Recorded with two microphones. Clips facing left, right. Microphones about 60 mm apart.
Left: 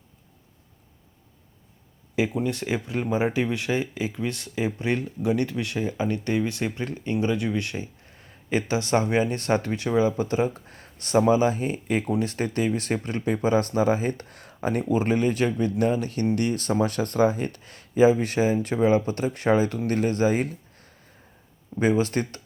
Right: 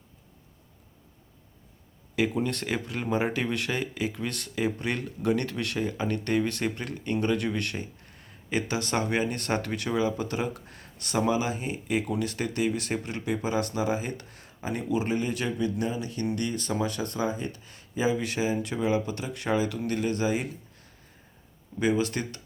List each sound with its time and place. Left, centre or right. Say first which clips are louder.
2.1 s speech: left 2 dB; centre
8.1 s speech: left 4 dB; left